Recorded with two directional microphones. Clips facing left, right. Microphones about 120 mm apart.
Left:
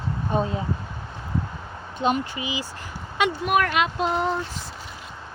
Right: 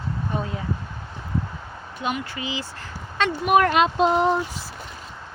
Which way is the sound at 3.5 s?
30° right (ahead or behind).